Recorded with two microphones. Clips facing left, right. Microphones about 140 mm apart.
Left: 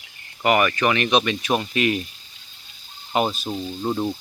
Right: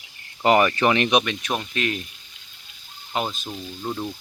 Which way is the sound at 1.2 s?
5° left (ahead or behind).